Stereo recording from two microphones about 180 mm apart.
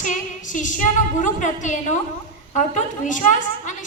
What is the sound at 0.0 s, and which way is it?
A woman's voice, 45° left (ahead or behind).